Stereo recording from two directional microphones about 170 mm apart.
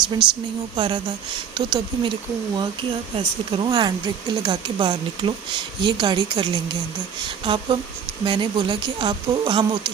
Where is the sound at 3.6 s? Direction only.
25° right (ahead or behind).